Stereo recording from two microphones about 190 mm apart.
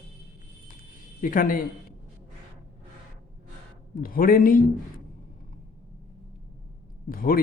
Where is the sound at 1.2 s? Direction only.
45° left (ahead or behind).